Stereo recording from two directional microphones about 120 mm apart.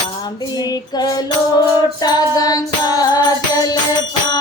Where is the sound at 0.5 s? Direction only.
35° left (ahead or behind).